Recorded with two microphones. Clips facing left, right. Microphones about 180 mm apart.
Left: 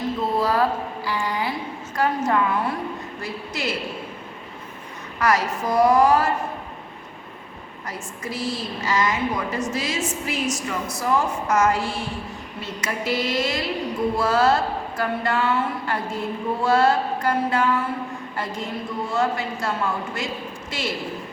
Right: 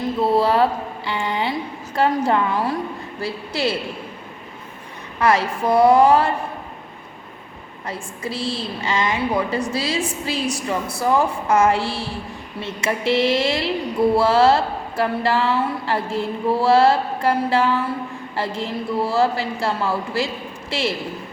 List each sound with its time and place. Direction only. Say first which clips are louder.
0.2 s a sound: right 5 dB; 30° right (ahead or behind)
2.0 s a woman's voice: right 3 dB; 30° right (ahead or behind)
5.2 s mantra: right 3 dB; 30° right (ahead or behind)
7.9 s a woman's voice: right 4 dB; 30° right (ahead or behind)
12.6 s mantra: right 5 dB; 25° right (ahead or behind)
18.3 s a woman's voice: right 5 dB; 30° right (ahead or behind)